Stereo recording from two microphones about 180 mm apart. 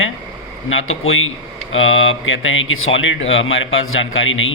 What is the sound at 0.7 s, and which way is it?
A man's voice, 90° left.